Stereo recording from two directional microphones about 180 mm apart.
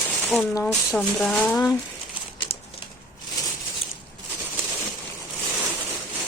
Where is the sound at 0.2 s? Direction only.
10° left (ahead or behind).